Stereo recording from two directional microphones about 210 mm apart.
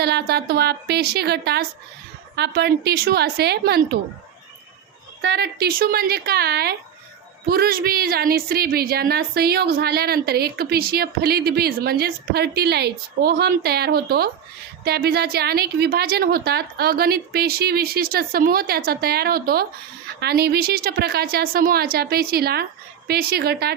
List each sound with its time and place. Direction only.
0.0 s a woman's voice: 50° right (ahead or behind)
5.2 s a woman's voice: 50° right (ahead or behind)